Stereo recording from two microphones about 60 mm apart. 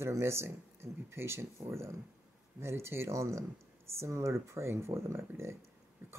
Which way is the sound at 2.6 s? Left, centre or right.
Right.